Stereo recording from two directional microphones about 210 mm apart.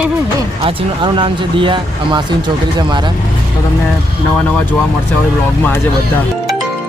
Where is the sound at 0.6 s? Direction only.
25° right (ahead or behind).